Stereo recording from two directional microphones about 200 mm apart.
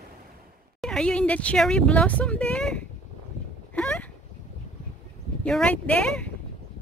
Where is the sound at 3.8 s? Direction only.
5° left (ahead or behind).